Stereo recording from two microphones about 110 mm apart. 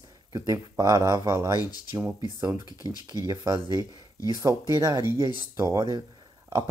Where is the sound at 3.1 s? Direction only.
35° right (ahead or behind).